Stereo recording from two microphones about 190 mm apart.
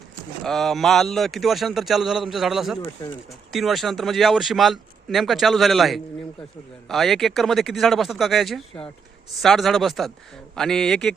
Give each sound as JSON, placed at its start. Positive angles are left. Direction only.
{"t": 0.4, "sound": "speech", "side_deg": 0}
{"t": 3.0, "sound": "speech", "side_deg": 15}
{"t": 3.5, "sound": "speech", "side_deg": 0}